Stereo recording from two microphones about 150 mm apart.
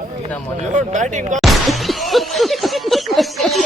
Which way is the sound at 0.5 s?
55° right (ahead or behind).